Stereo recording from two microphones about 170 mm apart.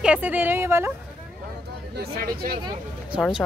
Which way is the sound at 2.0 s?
60° right (ahead or behind).